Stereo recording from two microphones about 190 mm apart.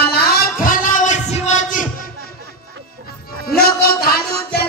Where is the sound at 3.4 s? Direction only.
55° left (ahead or behind).